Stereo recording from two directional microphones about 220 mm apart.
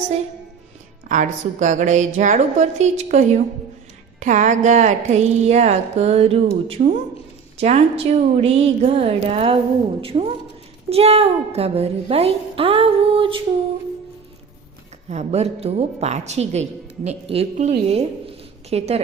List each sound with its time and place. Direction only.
1.0 s a woman's voice: 35° right (ahead or behind)
15.1 s a woman's voice: 30° right (ahead or behind)